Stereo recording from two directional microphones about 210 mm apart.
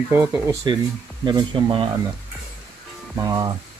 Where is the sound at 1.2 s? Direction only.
20° right (ahead or behind).